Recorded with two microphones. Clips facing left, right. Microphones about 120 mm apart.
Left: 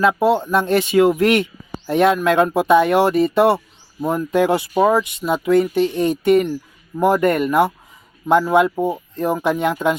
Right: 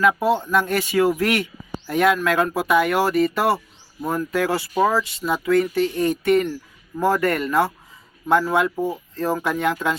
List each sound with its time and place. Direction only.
0.0 s speech: 25° left (ahead or behind)